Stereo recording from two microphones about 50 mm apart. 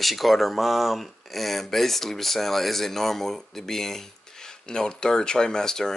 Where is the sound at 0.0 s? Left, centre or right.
Centre.